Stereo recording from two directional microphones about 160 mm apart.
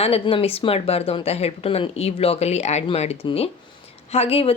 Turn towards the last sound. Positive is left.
turn(degrees=40)  # may be behind; listen again after turning